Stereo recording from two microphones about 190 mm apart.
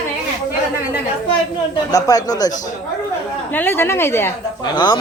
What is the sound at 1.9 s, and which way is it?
A woman's voice, 20° left (ahead or behind).